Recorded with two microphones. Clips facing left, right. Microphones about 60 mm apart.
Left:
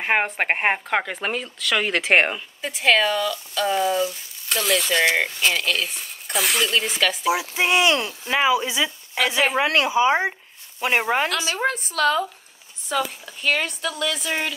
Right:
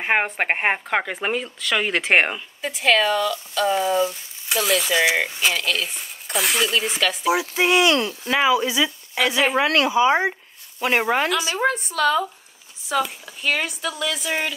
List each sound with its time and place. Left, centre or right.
0.0 s speech: centre
7.5 s speech: left
11.2 s speech: right
11.7 s speech: centre